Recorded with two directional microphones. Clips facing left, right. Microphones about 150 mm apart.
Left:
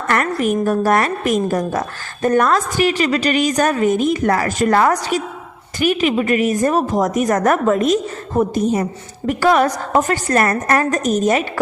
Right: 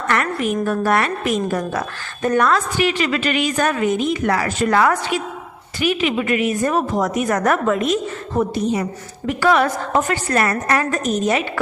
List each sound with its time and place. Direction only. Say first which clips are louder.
0.1 s a woman's voice: left 3 dB; 45° left (ahead or behind)